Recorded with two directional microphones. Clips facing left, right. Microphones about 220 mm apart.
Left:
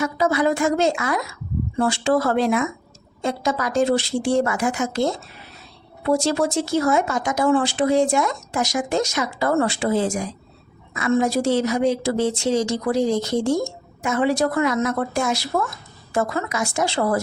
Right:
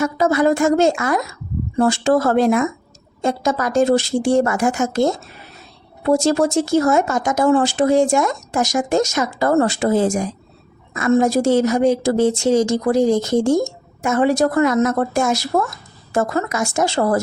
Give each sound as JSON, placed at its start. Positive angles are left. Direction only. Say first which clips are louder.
{"t": 0.0, "sound": "speech", "louder": "right 4 dB", "side_deg": -45}